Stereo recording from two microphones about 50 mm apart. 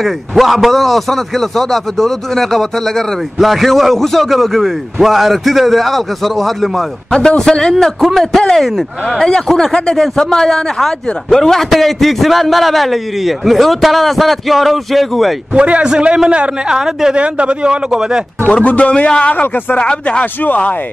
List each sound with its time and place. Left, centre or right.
0.3 s a man's voice: centre
7.2 s a man's voice: centre
15.5 s a man's voice: right
16.7 s a man's voice: centre
17.1 s a man's voice: right
18.6 s a man's voice: left
19.3 s a man's voice: left
19.8 s a man's voice: left